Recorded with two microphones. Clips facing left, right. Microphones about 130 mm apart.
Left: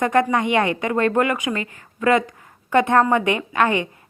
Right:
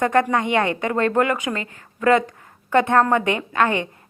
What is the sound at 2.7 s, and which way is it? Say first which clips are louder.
Speech: even; 15° left (ahead or behind).